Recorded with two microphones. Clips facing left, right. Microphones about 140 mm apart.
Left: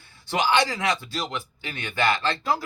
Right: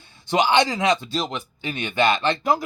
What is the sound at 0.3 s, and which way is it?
Speech, 20° right (ahead or behind).